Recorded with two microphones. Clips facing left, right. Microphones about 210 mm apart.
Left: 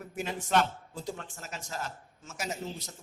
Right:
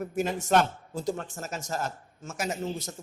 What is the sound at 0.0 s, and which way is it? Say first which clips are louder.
Speech: right 7 dB; 45° right (ahead or behind).